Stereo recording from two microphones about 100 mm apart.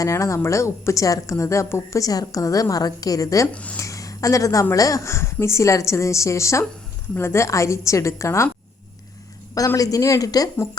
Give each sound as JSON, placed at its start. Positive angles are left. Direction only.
{"t": 0.0, "sound": "a woman's voice", "side_deg": 30}
{"t": 3.5, "sound": "speech", "side_deg": 10}
{"t": 3.8, "sound": "a woman's voice", "side_deg": 35}
{"t": 9.6, "sound": "a woman's voice", "side_deg": 35}